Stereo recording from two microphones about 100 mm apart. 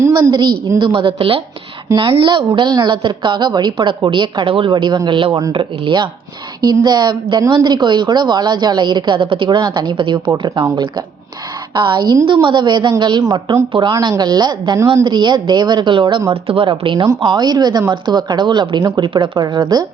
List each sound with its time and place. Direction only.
0.1 s a woman's voice: 45° right (ahead or behind)
0.8 s a woman's voice: 60° right (ahead or behind)
6.8 s a woman's voice: 45° right (ahead or behind)
11.7 s a woman's voice: 50° right (ahead or behind)
16.3 s a woman's voice: 65° right (ahead or behind); by 19.6 s 45° right (ahead or behind)